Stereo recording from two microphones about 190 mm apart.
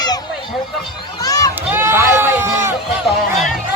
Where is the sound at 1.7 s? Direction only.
10° right (ahead or behind).